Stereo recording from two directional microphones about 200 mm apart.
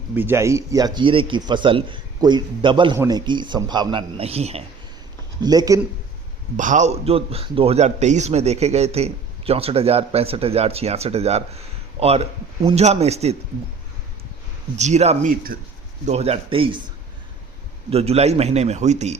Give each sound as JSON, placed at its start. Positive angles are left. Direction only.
{"t": 0.2, "sound": "a man's voice", "side_deg": -10}
{"t": 5.4, "sound": "a man's voice", "side_deg": -20}
{"t": 6.6, "sound": "speech", "side_deg": -40}
{"t": 14.8, "sound": "a man's voice", "side_deg": -35}
{"t": 17.9, "sound": "speech", "side_deg": -30}